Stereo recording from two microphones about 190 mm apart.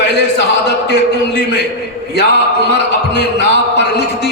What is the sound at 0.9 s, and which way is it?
A man's voice, 60° left (ahead or behind).